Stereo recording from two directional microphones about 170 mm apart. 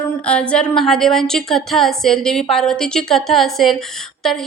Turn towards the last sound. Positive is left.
turn(degrees=0)  # may be behind; listen again after turning